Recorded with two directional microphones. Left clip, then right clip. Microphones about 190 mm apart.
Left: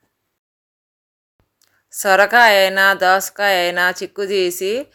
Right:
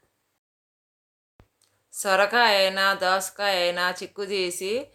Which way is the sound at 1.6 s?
40° left (ahead or behind).